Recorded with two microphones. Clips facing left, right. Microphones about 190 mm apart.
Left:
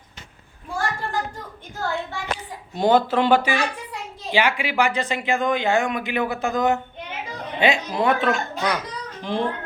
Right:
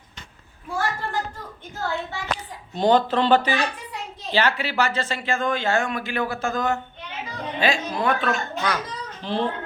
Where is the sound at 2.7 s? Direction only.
10° left (ahead or behind).